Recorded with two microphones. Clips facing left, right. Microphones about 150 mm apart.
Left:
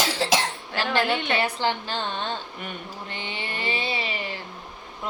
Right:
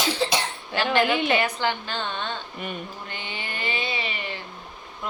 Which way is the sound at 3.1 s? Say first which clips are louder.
Left 1 dB; 30° left (ahead or behind).